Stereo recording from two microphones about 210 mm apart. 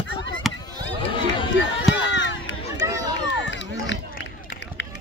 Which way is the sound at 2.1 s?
55° left (ahead or behind).